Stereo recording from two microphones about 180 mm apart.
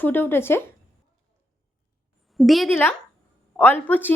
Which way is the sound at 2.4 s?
Centre (ahead or behind).